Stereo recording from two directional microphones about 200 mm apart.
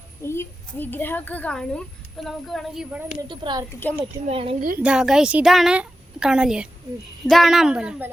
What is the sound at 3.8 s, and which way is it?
Speech, 10° left (ahead or behind).